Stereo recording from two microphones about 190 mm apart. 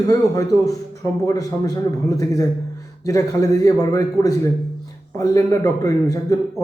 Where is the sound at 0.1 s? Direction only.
20° left (ahead or behind).